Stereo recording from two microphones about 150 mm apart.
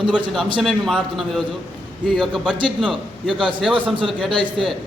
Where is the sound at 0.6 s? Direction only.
Centre (ahead or behind).